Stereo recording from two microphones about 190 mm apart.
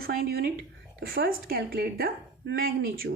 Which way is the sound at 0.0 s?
50° right (ahead or behind).